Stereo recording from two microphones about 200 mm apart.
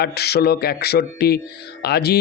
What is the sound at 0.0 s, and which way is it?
Speech, 55° left (ahead or behind).